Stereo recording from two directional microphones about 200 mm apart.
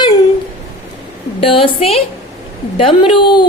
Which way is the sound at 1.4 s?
25° left (ahead or behind).